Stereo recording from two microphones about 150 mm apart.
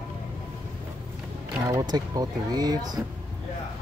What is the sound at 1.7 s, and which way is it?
Speech, 25° right (ahead or behind).